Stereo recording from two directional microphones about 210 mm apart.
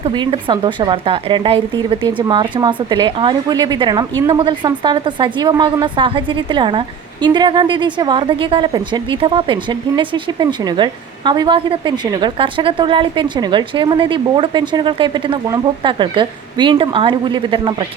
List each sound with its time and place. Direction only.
0.0 s speech: 25° right (ahead or behind)